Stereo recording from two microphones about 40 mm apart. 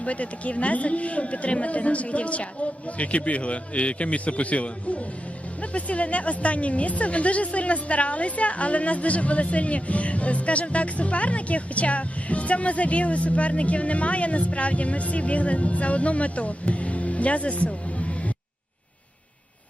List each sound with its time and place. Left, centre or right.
0.0 s speech: left
17.7 s music: left